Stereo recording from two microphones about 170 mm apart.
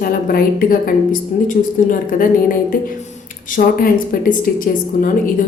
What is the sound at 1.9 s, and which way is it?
A woman's voice, 55° left (ahead or behind).